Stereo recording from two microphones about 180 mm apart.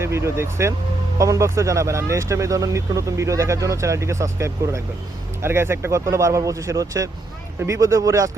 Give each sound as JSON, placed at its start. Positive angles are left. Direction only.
{"t": 0.0, "sound": "speech", "side_deg": -15}